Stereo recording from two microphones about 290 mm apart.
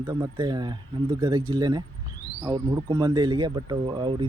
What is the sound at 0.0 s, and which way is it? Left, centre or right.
A man's voice, centre.